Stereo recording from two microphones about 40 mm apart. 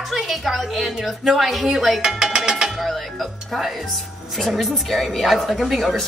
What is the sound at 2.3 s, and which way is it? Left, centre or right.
Music, centre.